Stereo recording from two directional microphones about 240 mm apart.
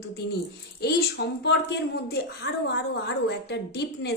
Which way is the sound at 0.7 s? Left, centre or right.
Left.